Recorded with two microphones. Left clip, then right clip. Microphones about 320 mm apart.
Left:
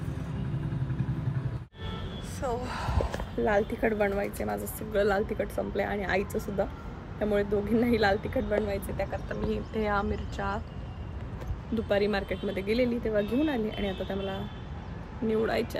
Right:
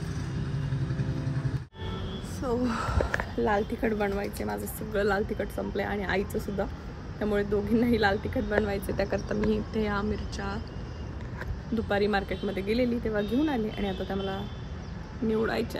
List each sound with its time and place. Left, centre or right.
2.4 s speech: right
3.4 s speech: centre
6.3 s speech: centre
7.2 s speech: centre
8.6 s speech: right
9.3 s speech: centre
11.7 s speech: centre